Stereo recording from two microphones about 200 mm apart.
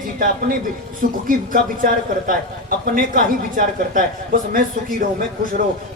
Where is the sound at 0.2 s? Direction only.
45° right (ahead or behind).